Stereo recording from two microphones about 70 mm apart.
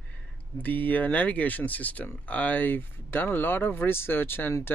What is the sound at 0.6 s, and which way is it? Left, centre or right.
Speech, left.